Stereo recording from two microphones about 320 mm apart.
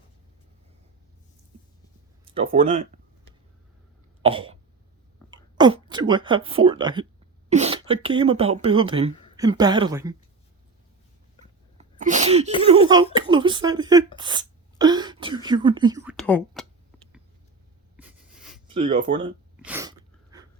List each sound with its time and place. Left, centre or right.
2.2 s speech: centre
4.2 s cough: centre
5.3 s speech: centre
11.8 s sneeze: right
13.1 s speech: centre
16.1 s speech: centre
17.9 s writing: centre
18.7 s speech: centre
19.6 s sneeze: centre